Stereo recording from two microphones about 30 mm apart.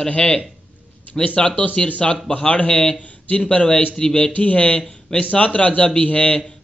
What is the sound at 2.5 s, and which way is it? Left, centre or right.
A man's voice, left.